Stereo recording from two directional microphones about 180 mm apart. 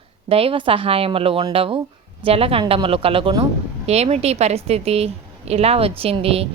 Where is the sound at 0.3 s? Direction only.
30° right (ahead or behind).